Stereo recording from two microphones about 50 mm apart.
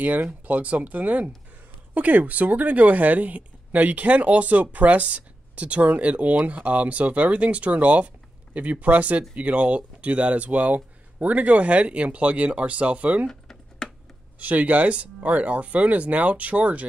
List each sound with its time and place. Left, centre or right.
0.0 s speech: right
13.3 s typing: centre
14.4 s speech: right